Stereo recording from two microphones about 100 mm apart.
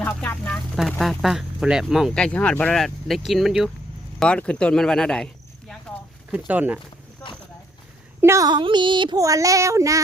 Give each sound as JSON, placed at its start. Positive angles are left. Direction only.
{"t": 0.0, "sound": "a sound", "side_deg": 15}
{"t": 0.8, "sound": "speech", "side_deg": 0}
{"t": 2.1, "sound": "speech", "side_deg": 10}
{"t": 2.7, "sound": "speech", "side_deg": 5}
{"t": 4.2, "sound": "speech", "side_deg": 10}
{"t": 6.5, "sound": "speech", "side_deg": -15}
{"t": 8.2, "sound": "speech", "side_deg": -30}
{"t": 8.4, "sound": "speech", "side_deg": -50}
{"t": 9.1, "sound": "child singing", "side_deg": -35}